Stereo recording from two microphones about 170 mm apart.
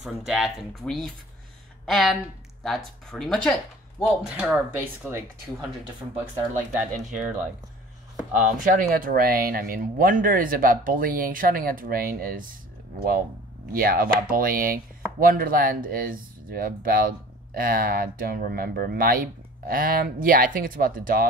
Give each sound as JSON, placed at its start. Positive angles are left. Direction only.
{"t": 0.0, "sound": "speech", "side_deg": 0}
{"t": 6.7, "sound": "speech", "side_deg": -45}
{"t": 8.3, "sound": "speech", "side_deg": -50}
{"t": 13.7, "sound": "speech", "side_deg": -60}